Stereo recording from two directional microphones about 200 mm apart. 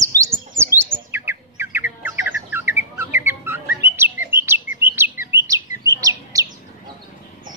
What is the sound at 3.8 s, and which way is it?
Chirp, 10° right (ahead or behind).